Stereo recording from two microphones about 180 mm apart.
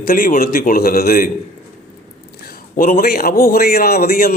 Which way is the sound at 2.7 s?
50° left (ahead or behind).